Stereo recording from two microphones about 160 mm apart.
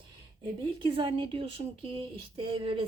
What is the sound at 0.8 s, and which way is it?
Speech, 30° right (ahead or behind).